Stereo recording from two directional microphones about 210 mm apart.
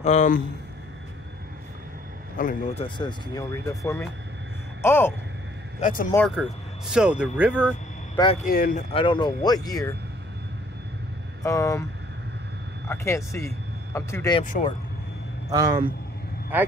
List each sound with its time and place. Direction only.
0.0 s speech: 35° left (ahead or behind)
2.3 s speech: 40° left (ahead or behind)
2.7 s speech: 25° left (ahead or behind)
5.8 s speech: 40° left (ahead or behind)
6.3 s speech: 5° right (ahead or behind)
8.5 s speech: 40° left (ahead or behind)
8.9 s speech: 20° left (ahead or behind)
11.4 s speech: 15° left (ahead or behind)
12.8 s speech: 10° left (ahead or behind)
14.4 s speech: 40° left (ahead or behind)
15.5 s speech: 20° right (ahead or behind)